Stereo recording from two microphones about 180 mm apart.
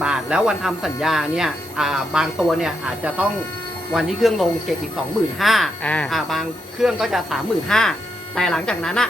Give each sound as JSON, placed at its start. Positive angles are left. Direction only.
{"t": 0.0, "sound": "speech", "side_deg": -5}